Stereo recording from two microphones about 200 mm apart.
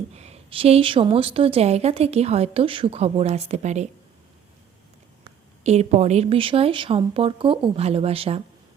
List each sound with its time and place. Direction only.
0.1 s a woman's voice: 30° right (ahead or behind)
5.6 s a woman's voice: 35° right (ahead or behind)